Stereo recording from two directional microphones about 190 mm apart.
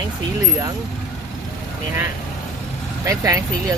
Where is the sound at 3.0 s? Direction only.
15° right (ahead or behind).